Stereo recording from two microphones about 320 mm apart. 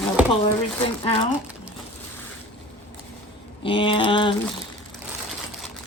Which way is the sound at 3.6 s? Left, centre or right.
Centre.